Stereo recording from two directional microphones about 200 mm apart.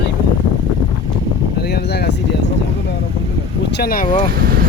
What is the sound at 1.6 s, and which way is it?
Speech, 55° left (ahead or behind).